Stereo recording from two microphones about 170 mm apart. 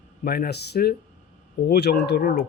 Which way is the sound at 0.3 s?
65° left (ahead or behind).